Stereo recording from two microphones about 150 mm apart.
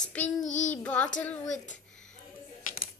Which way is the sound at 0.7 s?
10° left (ahead or behind).